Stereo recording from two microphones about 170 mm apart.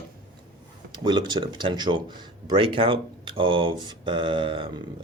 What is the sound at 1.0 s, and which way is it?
Speech, 25° right (ahead or behind).